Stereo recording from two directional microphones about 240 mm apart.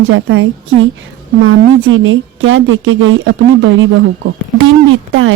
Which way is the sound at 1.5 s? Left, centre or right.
Right.